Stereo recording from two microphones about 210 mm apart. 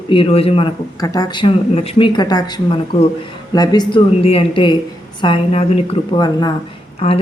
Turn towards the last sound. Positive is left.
turn(degrees=25)  # may be behind; listen again after turning